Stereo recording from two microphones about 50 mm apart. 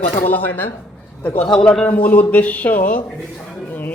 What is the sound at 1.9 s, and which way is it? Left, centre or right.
Speech, left.